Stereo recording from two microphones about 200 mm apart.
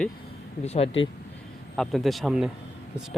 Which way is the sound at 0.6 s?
30° left (ahead or behind).